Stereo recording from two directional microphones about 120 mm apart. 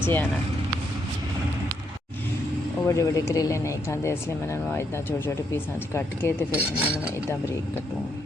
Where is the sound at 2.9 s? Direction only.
25° left (ahead or behind).